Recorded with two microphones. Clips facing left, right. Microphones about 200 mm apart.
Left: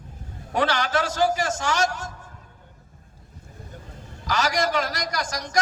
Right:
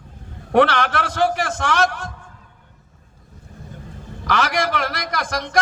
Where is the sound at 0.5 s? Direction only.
60° right (ahead or behind).